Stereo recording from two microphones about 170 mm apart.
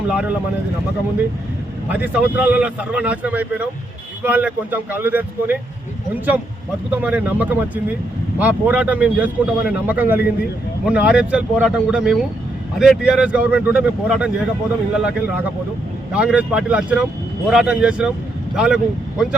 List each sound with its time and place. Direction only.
0.1 s speech: 5° right (ahead or behind)
1.9 s speech: 10° right (ahead or behind)
6.9 s speech: 10° right (ahead or behind)